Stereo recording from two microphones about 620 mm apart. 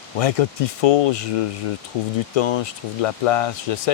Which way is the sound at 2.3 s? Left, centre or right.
Left.